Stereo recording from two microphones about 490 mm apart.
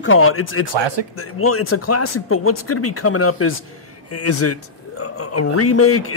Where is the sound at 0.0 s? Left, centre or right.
Left.